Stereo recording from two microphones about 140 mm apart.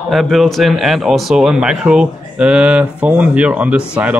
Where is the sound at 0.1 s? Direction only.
Centre (ahead or behind).